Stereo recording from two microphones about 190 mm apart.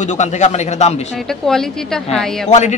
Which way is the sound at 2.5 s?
35° left (ahead or behind).